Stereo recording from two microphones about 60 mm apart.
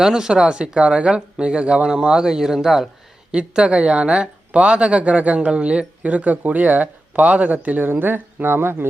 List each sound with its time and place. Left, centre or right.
0.0 s speech: centre
3.3 s speech: centre; by 8.9 s right